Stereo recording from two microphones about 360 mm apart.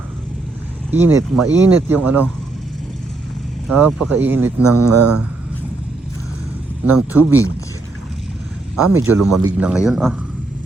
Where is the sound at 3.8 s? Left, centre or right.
Centre.